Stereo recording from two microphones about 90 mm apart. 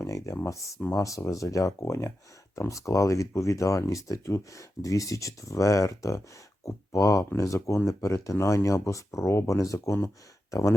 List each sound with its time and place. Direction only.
0.0 s speech: 35° left (ahead or behind)